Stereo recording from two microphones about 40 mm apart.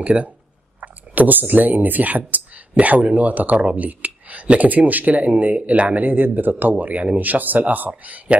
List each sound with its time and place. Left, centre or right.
0.0 s speech: right